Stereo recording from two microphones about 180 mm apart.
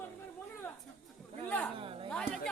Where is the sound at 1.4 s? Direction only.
10° left (ahead or behind).